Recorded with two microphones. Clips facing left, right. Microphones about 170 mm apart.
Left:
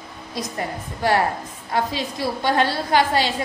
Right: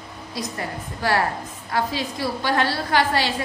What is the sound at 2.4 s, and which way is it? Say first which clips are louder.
Speech: left 3 dB; 20° left (ahead or behind).